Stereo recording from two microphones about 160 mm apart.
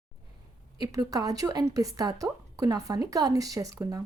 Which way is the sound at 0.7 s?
25° right (ahead or behind).